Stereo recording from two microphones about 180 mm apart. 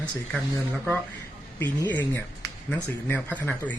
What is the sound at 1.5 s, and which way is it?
Speech, 15° left (ahead or behind).